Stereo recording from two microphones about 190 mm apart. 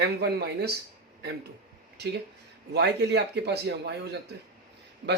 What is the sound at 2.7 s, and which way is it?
Speech, 60° right (ahead or behind).